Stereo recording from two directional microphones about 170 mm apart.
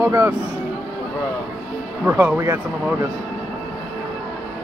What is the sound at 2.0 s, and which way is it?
Speech, 10° right (ahead or behind).